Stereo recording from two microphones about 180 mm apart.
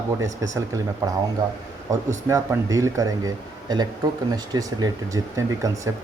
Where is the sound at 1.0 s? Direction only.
20° right (ahead or behind).